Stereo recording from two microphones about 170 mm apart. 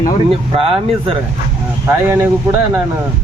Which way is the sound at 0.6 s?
35° right (ahead or behind).